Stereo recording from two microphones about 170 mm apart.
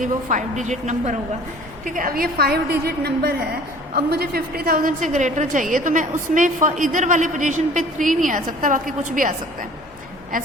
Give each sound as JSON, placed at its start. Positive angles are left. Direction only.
{"t": 0.0, "sound": "a woman's voice", "side_deg": -50}